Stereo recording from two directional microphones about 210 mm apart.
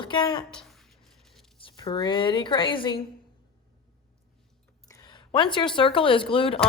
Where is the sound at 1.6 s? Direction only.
20° left (ahead or behind).